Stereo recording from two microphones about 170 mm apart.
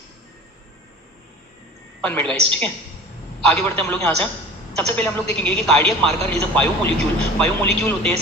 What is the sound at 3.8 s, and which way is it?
A man's voice, 10° left (ahead or behind).